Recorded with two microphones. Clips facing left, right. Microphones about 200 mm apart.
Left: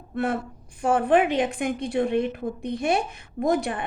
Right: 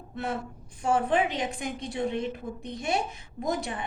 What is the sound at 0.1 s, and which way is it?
A woman's voice, 55° left (ahead or behind).